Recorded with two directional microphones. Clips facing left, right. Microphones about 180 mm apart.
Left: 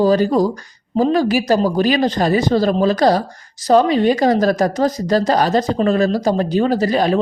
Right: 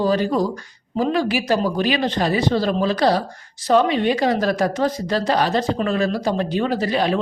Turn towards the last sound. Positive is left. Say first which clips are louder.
# left 4 dB
turn(degrees=40)  # may be behind; listen again after turning